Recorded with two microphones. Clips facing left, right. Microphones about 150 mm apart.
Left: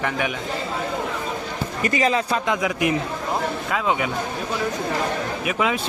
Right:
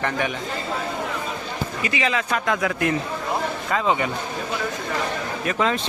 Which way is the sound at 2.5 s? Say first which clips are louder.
Right 1 dB; 15° left (ahead or behind).